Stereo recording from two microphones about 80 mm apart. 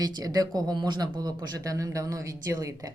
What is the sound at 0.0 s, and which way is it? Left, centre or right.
Speech, right.